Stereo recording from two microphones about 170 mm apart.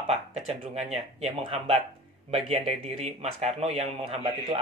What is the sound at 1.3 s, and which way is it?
Speech, 30° right (ahead or behind).